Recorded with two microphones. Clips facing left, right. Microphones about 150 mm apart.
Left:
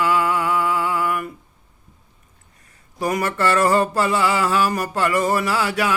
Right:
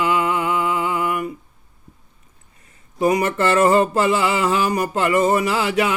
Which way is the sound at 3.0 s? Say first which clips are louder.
Right 3 dB; 20° right (ahead or behind).